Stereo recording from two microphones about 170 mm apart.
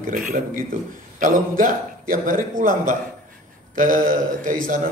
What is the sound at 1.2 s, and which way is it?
A man's voice, 50° right (ahead or behind).